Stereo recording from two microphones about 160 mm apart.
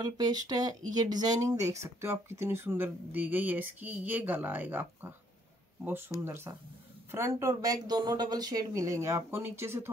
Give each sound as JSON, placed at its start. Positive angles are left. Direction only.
{"t": 0.0, "sound": "speech", "side_deg": -25}